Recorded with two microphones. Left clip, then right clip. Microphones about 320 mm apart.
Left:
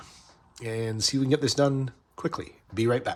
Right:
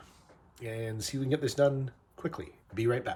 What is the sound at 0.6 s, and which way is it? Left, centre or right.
Speech, centre.